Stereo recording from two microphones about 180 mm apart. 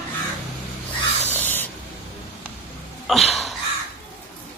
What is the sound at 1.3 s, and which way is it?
Spray, 10° left (ahead or behind).